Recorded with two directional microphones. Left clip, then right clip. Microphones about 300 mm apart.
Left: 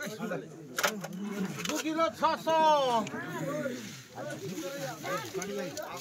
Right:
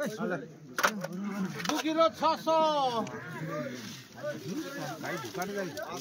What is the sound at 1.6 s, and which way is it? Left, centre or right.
Speech, centre.